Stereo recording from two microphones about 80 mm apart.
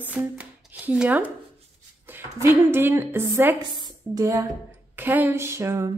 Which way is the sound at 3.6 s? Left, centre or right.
Right.